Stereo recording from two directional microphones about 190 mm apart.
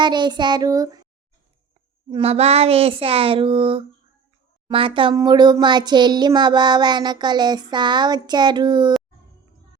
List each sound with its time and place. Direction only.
0.0 s a child's voice: 25° right (ahead or behind)
2.0 s a child's voice: 30° right (ahead or behind)